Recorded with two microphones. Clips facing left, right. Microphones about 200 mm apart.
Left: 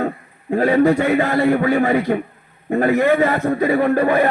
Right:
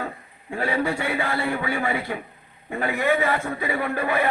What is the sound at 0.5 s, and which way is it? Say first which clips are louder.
A man's voice: left 11 dB; 40° left (ahead or behind).